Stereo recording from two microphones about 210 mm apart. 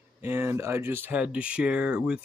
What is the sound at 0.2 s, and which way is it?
Speech, 10° right (ahead or behind).